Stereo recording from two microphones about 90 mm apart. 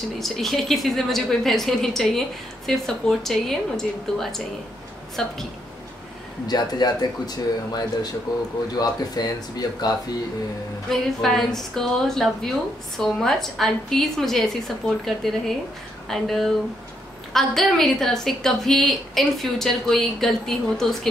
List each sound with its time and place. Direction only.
0.2 s a woman's voice: centre (ahead or behind)
6.4 s speech: 50° left (ahead or behind)
10.9 s a woman's voice: 5° left (ahead or behind)